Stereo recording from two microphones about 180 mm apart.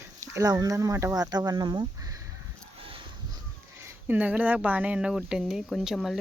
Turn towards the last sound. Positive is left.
turn(degrees=0)  # may be behind; listen again after turning